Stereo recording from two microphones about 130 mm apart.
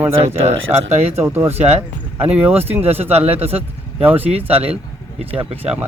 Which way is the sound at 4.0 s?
15° right (ahead or behind).